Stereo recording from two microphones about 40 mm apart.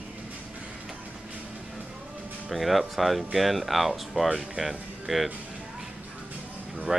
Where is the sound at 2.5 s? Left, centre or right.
Centre.